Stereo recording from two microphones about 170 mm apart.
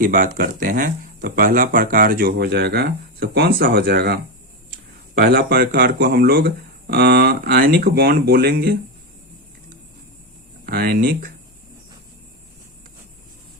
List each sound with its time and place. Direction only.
0.0 s speech: 55° right (ahead or behind)
10.7 s speech: 65° right (ahead or behind)